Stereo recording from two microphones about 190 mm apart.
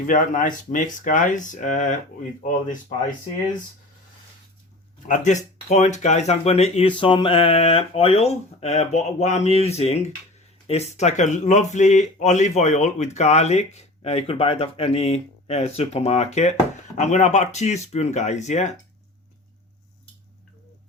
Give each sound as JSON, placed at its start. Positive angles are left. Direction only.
{"t": 0.1, "sound": "speech", "side_deg": 45}
{"t": 5.0, "sound": "speech", "side_deg": 40}